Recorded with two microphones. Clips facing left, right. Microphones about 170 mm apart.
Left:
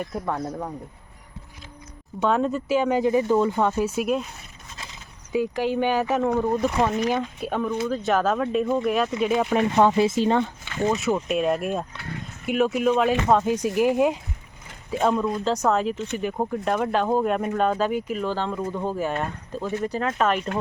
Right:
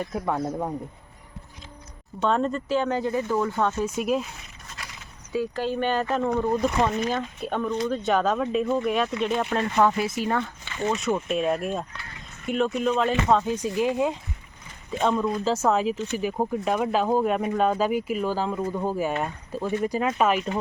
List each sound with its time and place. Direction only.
0.1 s speech: 5° right (ahead or behind)
2.2 s speech: 5° left (ahead or behind)
4.8 s speech: 20° left (ahead or behind)
9.7 s speech: 25° left (ahead or behind)
10.8 s speech: 5° left (ahead or behind)